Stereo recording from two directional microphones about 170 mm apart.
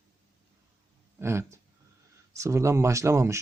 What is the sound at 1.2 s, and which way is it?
A man's voice, 15° right (ahead or behind).